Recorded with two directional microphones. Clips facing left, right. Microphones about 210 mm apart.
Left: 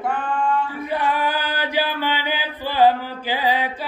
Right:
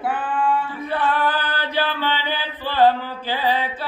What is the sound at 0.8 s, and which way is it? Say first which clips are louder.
Chant: right 2 dB; 10° left (ahead or behind).